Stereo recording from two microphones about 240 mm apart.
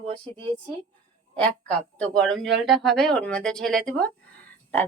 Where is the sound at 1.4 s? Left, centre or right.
Centre.